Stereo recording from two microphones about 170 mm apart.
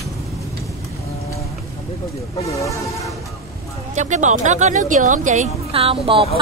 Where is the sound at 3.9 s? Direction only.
45° right (ahead or behind).